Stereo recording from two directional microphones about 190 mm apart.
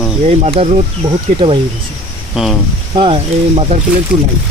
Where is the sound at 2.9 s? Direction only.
30° right (ahead or behind).